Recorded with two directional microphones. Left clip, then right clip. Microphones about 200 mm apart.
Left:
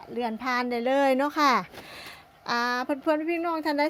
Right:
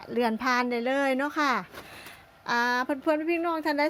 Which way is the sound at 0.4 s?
5° right (ahead or behind).